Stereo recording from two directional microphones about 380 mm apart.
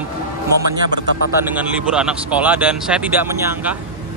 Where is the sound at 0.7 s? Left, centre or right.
Right.